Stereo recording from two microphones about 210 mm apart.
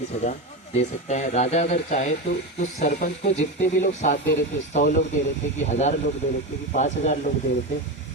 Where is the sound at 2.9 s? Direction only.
50° left (ahead or behind).